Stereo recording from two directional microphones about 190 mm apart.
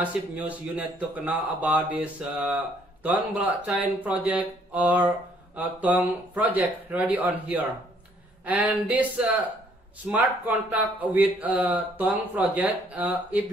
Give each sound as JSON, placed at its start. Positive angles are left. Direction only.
{"t": 0.0, "sound": "speech", "side_deg": -5}